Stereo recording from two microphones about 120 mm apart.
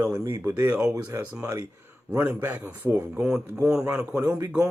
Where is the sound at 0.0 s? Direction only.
30° right (ahead or behind).